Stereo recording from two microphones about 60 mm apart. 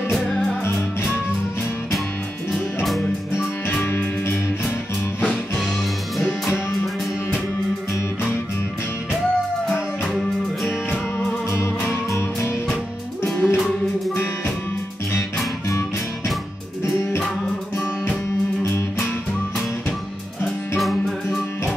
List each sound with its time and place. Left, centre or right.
3.8 s music: left
11.5 s music: left
20.4 s music: centre